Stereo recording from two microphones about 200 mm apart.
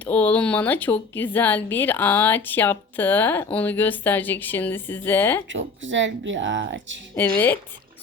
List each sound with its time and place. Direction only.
0.0 s speech: 5° left (ahead or behind)
5.5 s speech: 70° right (ahead or behind)
7.2 s speech: 10° left (ahead or behind)